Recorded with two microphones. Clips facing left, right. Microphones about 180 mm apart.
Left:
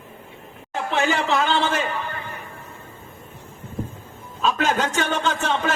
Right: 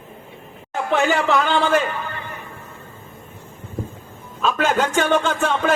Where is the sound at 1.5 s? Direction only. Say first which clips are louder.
Right 4 dB; 45° right (ahead or behind).